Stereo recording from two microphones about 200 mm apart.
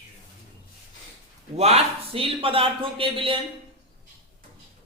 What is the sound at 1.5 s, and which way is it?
A man's voice, 30° right (ahead or behind).